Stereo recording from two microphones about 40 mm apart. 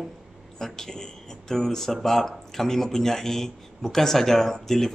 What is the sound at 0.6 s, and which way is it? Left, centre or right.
A man's voice, centre.